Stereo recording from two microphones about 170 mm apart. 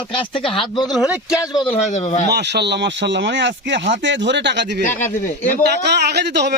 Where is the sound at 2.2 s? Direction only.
80° right.